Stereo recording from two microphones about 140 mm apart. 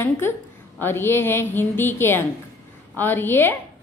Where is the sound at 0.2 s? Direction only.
15° left (ahead or behind).